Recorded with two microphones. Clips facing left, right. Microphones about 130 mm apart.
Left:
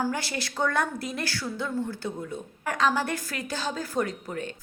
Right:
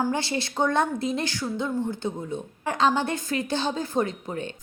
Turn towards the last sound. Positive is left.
turn(degrees=-25)  # may be behind; listen again after turning